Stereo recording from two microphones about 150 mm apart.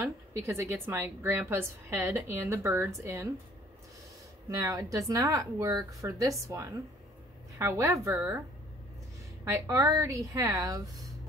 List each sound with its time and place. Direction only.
0.0 s a woman's voice: 20° right (ahead or behind)
4.5 s speech: 20° right (ahead or behind)
9.4 s speech: 20° right (ahead or behind)